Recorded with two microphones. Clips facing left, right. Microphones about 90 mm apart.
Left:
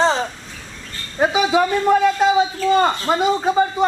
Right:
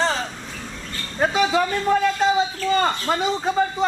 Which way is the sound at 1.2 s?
10° left (ahead or behind).